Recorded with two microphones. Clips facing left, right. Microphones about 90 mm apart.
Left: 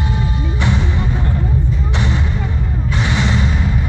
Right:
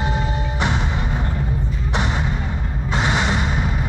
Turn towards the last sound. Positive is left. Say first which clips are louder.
# left 1 dB
turn(degrees=-25)  # may be behind; listen again after turning